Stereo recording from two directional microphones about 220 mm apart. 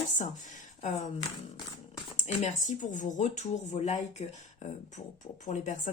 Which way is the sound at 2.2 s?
35° left (ahead or behind).